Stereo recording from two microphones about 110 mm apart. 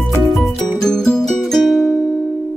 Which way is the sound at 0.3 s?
5° left (ahead or behind).